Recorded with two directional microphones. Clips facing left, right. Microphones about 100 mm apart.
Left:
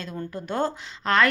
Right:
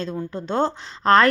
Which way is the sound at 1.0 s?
35° right (ahead or behind).